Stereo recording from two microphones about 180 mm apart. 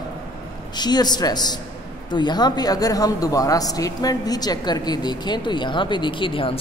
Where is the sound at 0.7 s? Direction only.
25° left (ahead or behind).